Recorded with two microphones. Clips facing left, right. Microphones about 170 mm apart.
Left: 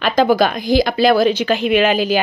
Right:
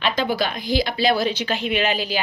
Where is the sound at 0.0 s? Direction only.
45° left (ahead or behind).